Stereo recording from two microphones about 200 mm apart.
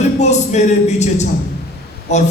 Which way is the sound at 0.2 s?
35° left (ahead or behind).